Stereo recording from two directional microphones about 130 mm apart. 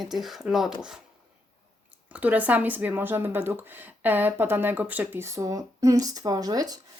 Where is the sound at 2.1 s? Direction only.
10° right (ahead or behind).